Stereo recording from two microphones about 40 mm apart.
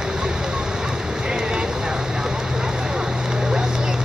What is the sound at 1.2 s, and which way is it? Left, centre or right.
Vehicle, centre.